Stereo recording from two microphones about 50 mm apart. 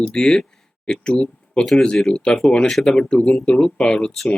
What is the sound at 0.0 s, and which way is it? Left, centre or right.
Speech, centre.